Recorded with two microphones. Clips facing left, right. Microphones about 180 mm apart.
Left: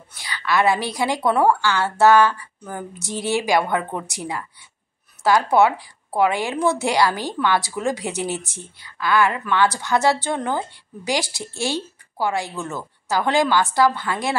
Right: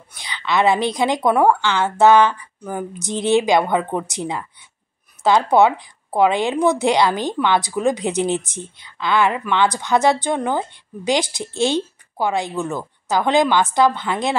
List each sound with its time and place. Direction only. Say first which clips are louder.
0.1 s a woman's voice: right 1 dB; 20° right (ahead or behind)